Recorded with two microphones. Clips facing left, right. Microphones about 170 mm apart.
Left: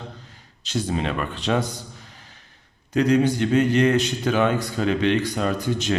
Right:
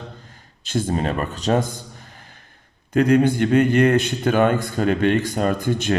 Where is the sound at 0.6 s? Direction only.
50° right (ahead or behind).